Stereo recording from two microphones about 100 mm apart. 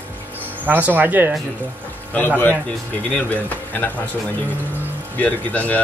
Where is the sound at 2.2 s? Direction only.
15° left (ahead or behind).